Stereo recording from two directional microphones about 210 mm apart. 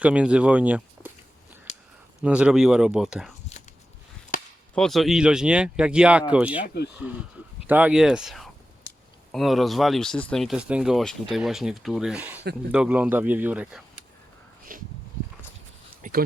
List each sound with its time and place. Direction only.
0.0 s speech: 5° right (ahead or behind)
2.2 s speech: 5° right (ahead or behind)
4.7 s speech: centre (ahead or behind)
7.7 s speech: 5° right (ahead or behind)
14.7 s a sound: 40° right (ahead or behind)
16.0 s a sound: 40° right (ahead or behind)